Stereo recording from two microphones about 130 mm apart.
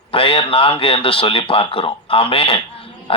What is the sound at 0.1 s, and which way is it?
A man's voice, 45° left (ahead or behind).